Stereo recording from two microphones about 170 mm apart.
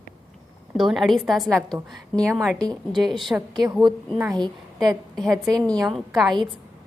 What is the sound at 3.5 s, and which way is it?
A woman's voice, 25° right (ahead or behind).